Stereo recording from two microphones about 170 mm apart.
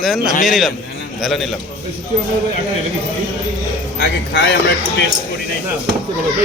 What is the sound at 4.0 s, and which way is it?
Speech, 80° left.